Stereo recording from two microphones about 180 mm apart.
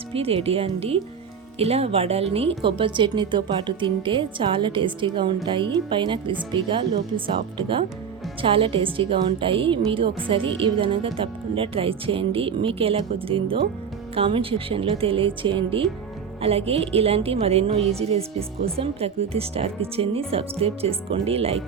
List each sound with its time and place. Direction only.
0.1 s a woman's voice: 30° right (ahead or behind)